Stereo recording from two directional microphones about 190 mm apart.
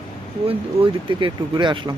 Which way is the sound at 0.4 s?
30° right (ahead or behind).